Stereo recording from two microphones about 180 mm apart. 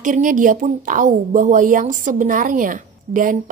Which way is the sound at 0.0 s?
45° right (ahead or behind).